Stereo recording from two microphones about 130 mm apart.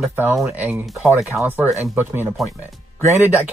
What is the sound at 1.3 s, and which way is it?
Speech, 15° right (ahead or behind).